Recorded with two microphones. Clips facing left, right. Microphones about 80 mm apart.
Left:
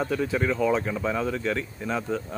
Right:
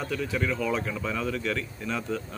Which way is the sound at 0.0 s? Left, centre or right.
Left.